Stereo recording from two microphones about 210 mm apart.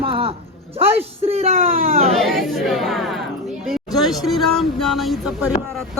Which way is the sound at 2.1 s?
Centre (ahead or behind).